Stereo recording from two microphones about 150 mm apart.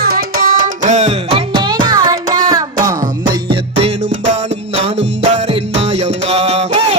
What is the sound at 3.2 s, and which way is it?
Music, 70° right (ahead or behind).